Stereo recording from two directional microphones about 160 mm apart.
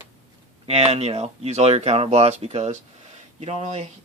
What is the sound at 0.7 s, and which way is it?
Speech, 40° right (ahead or behind).